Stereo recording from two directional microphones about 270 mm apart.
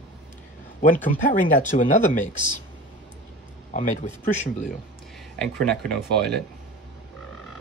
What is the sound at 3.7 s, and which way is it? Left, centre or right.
Speech, left.